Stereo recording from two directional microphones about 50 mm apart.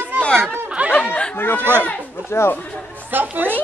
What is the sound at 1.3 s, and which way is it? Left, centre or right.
Chatter, left.